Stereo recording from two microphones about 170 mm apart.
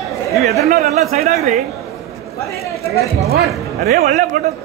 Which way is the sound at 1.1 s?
40° right (ahead or behind).